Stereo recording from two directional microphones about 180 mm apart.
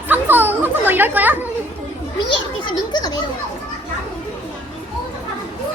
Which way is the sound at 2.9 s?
20° left (ahead or behind).